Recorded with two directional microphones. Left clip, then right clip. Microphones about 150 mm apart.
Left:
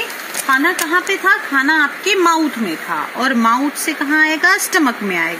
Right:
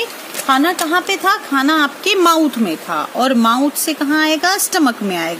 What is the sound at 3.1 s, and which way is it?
Speech, 80° right.